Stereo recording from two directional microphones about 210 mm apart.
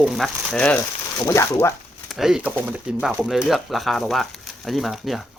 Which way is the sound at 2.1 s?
Centre (ahead or behind).